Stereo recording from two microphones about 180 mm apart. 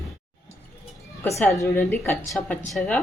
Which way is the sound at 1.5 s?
10° left (ahead or behind).